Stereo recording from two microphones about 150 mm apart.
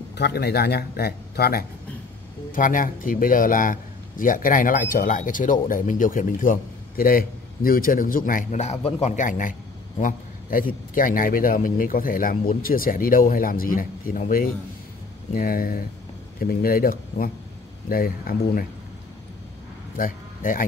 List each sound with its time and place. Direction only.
0.3 s speech: 90° left
2.5 s a man's voice: 65° left (ahead or behind)
20.0 s a man's voice: 65° left (ahead or behind)